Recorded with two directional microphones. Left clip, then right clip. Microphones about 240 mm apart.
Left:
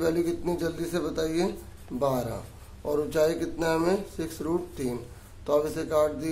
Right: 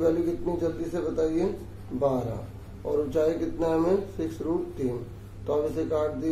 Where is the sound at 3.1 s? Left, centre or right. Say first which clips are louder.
Even; centre.